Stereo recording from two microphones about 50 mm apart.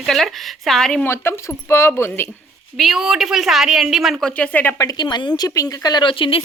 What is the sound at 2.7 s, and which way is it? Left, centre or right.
A woman's voice, centre.